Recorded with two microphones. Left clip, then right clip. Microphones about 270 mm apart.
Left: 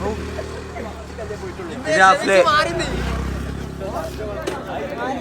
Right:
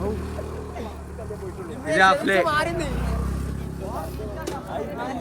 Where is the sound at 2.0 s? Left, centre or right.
Centre.